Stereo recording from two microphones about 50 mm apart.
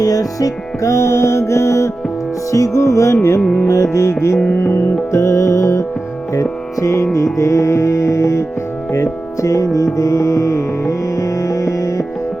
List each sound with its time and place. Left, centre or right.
0.8 s music: left